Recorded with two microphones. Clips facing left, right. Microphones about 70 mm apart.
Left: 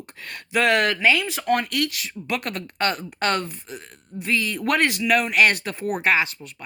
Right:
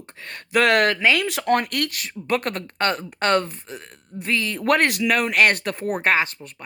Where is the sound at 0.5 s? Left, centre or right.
Right.